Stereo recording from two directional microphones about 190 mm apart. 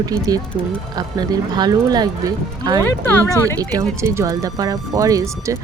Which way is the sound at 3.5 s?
15° right (ahead or behind).